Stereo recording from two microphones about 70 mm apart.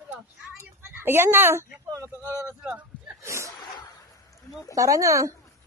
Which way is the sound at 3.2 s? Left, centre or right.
Right.